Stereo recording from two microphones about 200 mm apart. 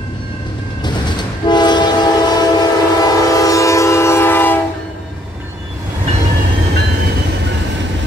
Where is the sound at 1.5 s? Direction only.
20° left (ahead or behind).